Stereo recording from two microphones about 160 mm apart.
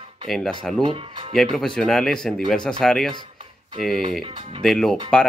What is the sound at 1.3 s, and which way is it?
Speech, centre (ahead or behind).